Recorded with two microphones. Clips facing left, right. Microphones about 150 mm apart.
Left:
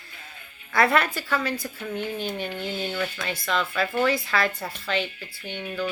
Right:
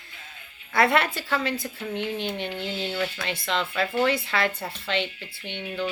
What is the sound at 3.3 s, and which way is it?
Speech, 25° right (ahead or behind).